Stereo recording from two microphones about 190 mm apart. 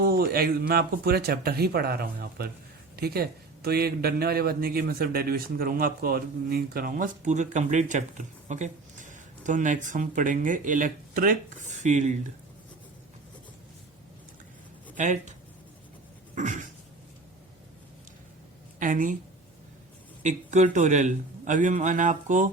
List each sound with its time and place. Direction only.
0.0 s speech: 55° right (ahead or behind)
14.9 s a man's voice: 40° right (ahead or behind)
16.3 s a sound: 40° right (ahead or behind)
18.8 s speech: 45° right (ahead or behind)
20.2 s a man's voice: 40° right (ahead or behind)